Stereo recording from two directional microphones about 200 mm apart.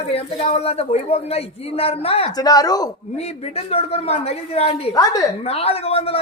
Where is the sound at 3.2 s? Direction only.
30° left (ahead or behind).